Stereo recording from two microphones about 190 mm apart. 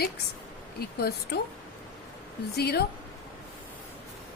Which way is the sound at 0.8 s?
55° left (ahead or behind).